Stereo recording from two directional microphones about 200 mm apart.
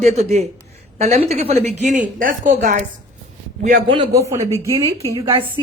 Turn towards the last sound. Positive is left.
turn(degrees=-25)  # may be behind; listen again after turning